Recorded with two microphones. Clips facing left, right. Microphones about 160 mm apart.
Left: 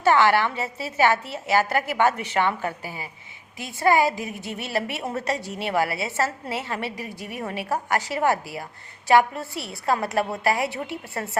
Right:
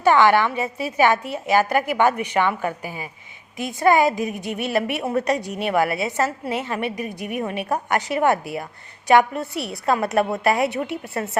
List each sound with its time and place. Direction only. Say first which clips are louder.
0.0 s a woman's voice: right 3 dB; 20° right (ahead or behind)